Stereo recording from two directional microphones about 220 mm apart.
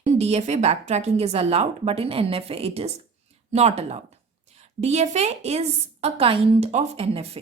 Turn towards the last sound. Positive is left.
turn(degrees=-25)  # may be behind; listen again after turning